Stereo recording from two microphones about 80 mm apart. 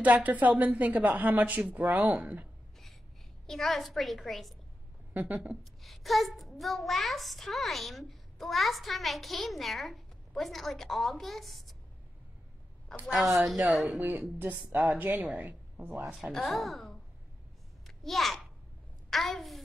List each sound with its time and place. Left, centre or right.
0.0 s a woman's voice: centre
3.4 s a child's voice: centre
5.1 s a woman's voice: centre
5.6 s a child's voice: centre
13.0 s a child's voice: centre
13.9 s a woman's voice: centre
16.3 s speech: centre
17.8 s a sound: centre
19.0 s a child's voice: centre